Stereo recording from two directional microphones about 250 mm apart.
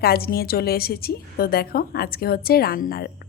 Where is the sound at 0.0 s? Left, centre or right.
Left.